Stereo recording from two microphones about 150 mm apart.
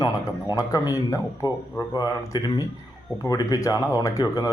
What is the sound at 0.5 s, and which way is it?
Speech, 25° left (ahead or behind).